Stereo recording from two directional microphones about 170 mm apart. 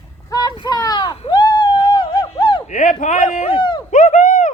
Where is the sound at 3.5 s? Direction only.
25° left (ahead or behind).